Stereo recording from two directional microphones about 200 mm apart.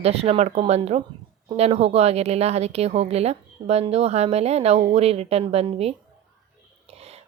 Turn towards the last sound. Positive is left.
turn(degrees=-30)  # may be behind; listen again after turning